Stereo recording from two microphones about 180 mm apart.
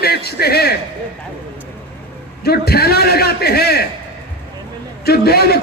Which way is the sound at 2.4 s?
60° left (ahead or behind).